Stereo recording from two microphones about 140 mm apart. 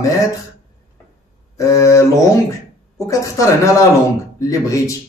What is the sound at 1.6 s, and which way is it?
Speech, 20° left (ahead or behind).